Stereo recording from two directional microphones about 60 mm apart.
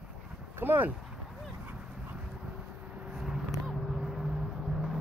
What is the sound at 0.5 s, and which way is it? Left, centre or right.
Speech, right.